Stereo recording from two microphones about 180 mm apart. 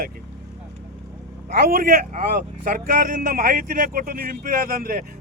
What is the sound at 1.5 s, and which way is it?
Speech, 55° right (ahead or behind).